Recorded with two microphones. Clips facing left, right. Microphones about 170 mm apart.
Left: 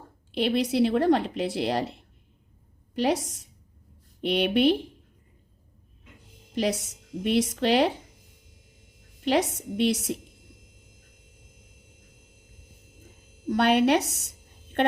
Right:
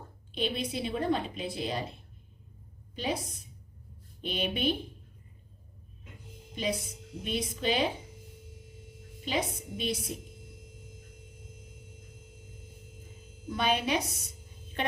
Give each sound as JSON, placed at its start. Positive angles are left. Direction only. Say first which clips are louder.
{"t": 0.3, "sound": "a woman's voice", "louder": "left 8 dB", "side_deg": 75}
{"t": 6.5, "sound": "speech", "louder": "left 6 dB", "side_deg": 75}
{"t": 9.2, "sound": "speech", "louder": "left 8 dB", "side_deg": 75}
{"t": 13.5, "sound": "a woman's voice", "louder": "left 8 dB", "side_deg": 70}